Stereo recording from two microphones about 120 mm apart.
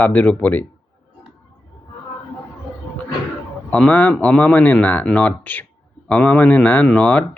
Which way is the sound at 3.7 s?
10° left (ahead or behind).